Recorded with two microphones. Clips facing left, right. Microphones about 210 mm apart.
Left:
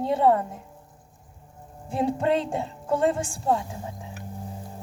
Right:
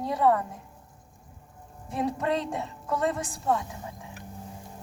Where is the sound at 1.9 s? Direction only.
30° left (ahead or behind).